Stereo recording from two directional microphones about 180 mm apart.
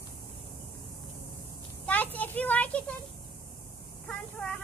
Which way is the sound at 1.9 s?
10° left (ahead or behind).